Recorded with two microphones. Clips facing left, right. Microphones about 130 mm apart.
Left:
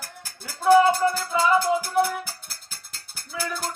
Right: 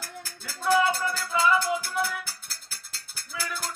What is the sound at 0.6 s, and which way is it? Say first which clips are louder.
Music: left 7 dB; 25° left (ahead or behind).